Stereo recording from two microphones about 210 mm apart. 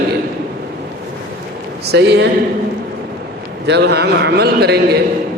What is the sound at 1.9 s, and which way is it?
Speech, 55° right (ahead or behind).